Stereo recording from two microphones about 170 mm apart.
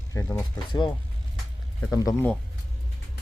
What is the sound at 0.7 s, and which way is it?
Speech, 25° left (ahead or behind).